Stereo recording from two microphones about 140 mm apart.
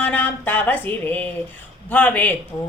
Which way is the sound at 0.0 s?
15° left (ahead or behind).